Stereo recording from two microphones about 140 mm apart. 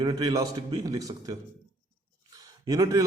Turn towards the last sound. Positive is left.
turn(degrees=-25)  # may be behind; listen again after turning